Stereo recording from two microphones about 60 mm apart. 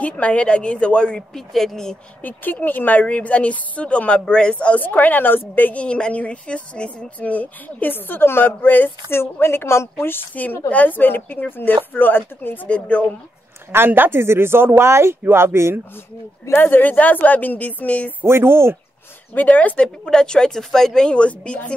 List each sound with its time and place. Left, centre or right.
0.0 s a woman's voice: left
1.3 s speech: centre
2.2 s a woman's voice: left
12.6 s a woman's voice: centre
13.7 s speech: right
16.5 s a woman's voice: left
18.2 s speech: right
19.3 s a woman's voice: left
20.1 s speech: centre